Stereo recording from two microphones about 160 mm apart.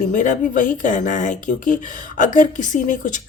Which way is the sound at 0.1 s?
50° left (ahead or behind).